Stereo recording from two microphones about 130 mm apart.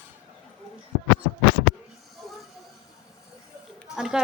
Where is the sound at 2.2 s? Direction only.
Centre (ahead or behind).